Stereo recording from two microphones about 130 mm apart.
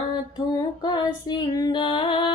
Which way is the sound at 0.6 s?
35° left (ahead or behind).